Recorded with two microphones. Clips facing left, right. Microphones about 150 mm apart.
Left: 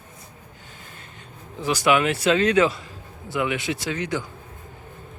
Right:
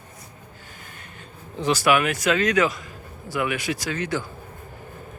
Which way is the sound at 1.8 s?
25° left (ahead or behind).